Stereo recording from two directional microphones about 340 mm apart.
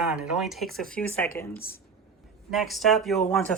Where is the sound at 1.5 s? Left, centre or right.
Left.